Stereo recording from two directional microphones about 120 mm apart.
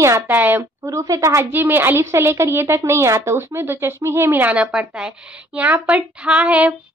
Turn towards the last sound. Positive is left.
turn(degrees=-10)  # may be behind; listen again after turning